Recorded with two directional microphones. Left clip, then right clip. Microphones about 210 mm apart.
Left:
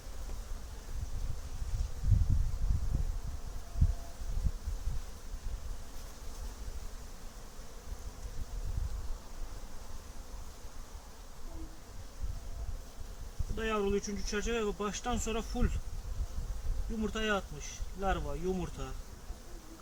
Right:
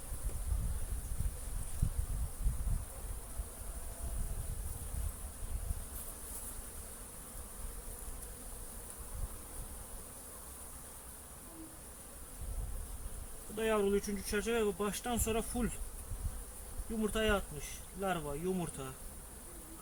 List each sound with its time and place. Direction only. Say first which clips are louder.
13.6 s speech: right 1 dB; 5° right (ahead or behind)
17.1 s speech: even; 5° right (ahead or behind)